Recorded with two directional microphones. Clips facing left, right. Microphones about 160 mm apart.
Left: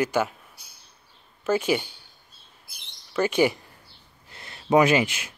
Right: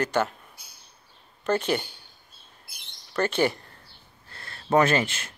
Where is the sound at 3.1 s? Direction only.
10° left (ahead or behind).